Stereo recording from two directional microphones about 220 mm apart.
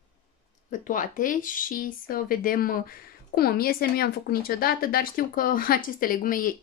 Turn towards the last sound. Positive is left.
turn(degrees=40)  # may be behind; listen again after turning